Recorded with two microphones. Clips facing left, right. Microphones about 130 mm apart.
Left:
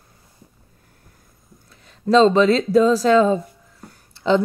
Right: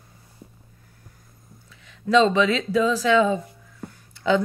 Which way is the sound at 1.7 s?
35° left (ahead or behind).